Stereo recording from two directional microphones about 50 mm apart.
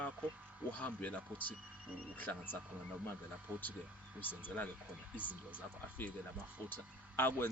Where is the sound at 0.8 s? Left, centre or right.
Left.